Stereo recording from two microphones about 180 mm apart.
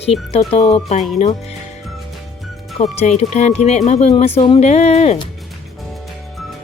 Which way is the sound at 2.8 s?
35° left (ahead or behind).